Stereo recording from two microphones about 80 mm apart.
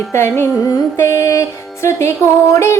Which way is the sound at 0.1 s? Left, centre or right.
Left.